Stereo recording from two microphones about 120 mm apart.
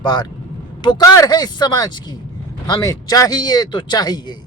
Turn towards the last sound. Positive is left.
turn(degrees=35)  # may be behind; listen again after turning